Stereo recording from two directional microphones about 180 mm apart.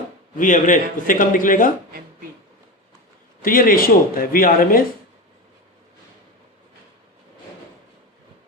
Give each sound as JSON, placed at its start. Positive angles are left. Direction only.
{"t": 0.3, "sound": "a man's voice", "side_deg": 45}
{"t": 3.4, "sound": "a man's voice", "side_deg": 50}